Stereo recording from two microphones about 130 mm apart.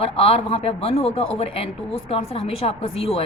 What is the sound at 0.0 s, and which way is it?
Speech, 45° left (ahead or behind).